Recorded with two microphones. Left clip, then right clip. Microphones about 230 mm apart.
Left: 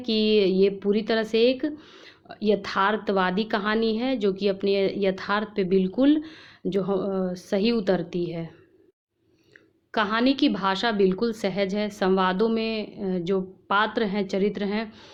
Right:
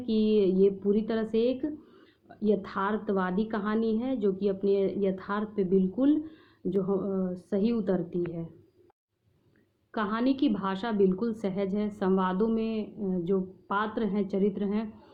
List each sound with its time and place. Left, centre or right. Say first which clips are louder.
0.0 s a woman's voice: left 4 dB; left
9.9 s a woman's voice: left 6 dB; left